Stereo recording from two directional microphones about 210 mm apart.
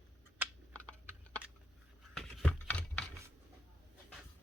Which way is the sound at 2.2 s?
5° left (ahead or behind).